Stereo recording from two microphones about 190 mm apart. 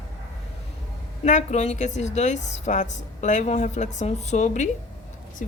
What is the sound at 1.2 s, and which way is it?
A woman's voice, 35° left (ahead or behind).